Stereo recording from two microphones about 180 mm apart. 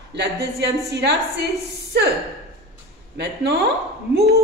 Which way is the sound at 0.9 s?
65° right (ahead or behind).